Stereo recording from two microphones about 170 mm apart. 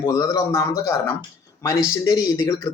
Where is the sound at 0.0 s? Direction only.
20° left (ahead or behind).